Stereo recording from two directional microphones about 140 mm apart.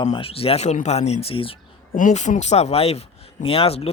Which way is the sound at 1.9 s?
65° left (ahead or behind).